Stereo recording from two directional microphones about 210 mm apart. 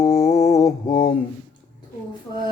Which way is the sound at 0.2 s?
15° left (ahead or behind).